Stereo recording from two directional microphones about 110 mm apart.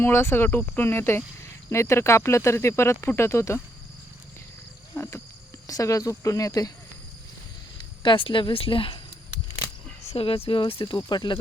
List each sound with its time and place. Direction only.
0.0 s speech: 20° left (ahead or behind)
4.9 s wild animals: 20° left (ahead or behind)
5.6 s speech: 30° left (ahead or behind)
7.8 s speech: 50° left (ahead or behind)
10.1 s speech: 60° left (ahead or behind); by 11.3 s 45° left (ahead or behind)